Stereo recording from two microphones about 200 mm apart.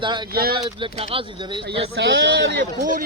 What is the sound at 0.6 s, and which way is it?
Speech, 25° right (ahead or behind).